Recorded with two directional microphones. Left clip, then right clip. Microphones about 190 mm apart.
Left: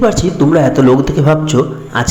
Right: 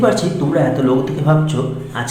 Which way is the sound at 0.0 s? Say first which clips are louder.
Left 4 dB; 35° left (ahead or behind).